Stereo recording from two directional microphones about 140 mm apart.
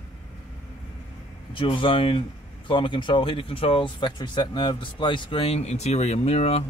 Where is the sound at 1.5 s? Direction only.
35° left (ahead or behind).